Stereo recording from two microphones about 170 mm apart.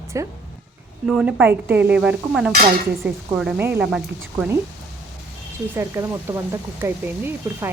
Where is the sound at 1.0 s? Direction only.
5° right (ahead or behind).